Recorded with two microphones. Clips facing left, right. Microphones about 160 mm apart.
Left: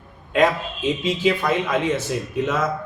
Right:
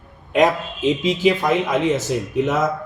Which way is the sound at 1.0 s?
15° right (ahead or behind).